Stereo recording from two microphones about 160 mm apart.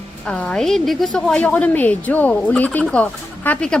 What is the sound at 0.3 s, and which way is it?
Female singing, 5° left (ahead or behind).